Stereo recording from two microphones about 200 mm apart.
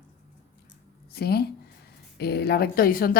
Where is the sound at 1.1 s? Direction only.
55° left (ahead or behind).